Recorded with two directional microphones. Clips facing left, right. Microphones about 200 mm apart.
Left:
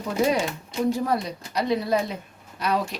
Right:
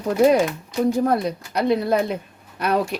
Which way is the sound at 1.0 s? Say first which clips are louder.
Right 5 dB; 55° right (ahead or behind).